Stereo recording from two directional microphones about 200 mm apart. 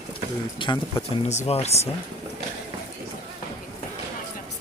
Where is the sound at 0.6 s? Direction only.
25° left (ahead or behind).